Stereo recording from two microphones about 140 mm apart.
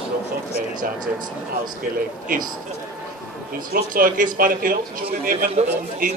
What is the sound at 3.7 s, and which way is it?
Speech, 80° right.